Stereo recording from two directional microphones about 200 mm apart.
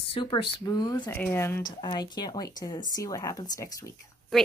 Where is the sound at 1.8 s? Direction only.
20° left (ahead or behind).